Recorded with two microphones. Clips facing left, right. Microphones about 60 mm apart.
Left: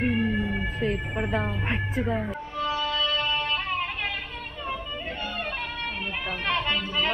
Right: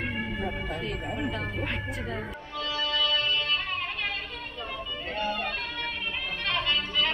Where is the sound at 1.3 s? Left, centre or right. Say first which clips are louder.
Left 4 dB; left.